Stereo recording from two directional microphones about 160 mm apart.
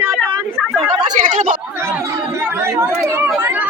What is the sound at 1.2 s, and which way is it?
Chatter, 50° right (ahead or behind).